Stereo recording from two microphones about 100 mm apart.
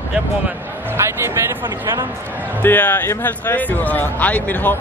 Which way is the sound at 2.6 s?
15° left (ahead or behind).